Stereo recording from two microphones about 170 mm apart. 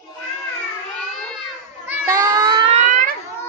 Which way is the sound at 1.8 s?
15° right (ahead or behind).